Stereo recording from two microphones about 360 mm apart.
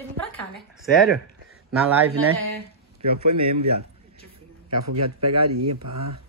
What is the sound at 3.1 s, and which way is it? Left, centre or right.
Speech, right.